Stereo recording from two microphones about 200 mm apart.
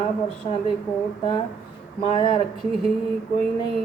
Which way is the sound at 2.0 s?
25° left (ahead or behind).